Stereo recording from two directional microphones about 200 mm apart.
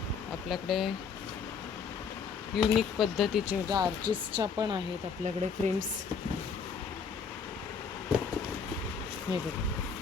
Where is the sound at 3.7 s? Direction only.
20° right (ahead or behind).